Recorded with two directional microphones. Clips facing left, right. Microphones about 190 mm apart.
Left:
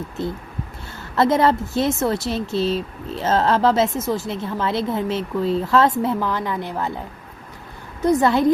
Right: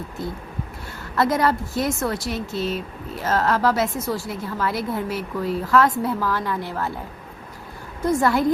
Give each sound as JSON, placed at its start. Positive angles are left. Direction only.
{"t": 1.1, "sound": "speech", "side_deg": 25}
{"t": 8.0, "sound": "speech", "side_deg": 20}